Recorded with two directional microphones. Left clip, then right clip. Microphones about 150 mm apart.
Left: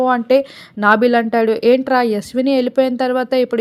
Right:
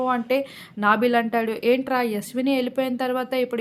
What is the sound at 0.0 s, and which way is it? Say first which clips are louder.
A woman's voice: left 9 dB; 40° left (ahead or behind).